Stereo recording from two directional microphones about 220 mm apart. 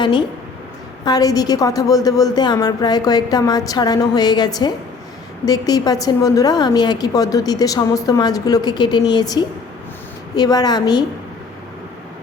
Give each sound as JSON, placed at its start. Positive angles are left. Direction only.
{"t": 0.0, "sound": "a woman's voice", "side_deg": 20}